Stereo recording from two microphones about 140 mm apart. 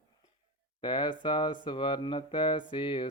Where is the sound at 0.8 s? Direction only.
35° left (ahead or behind).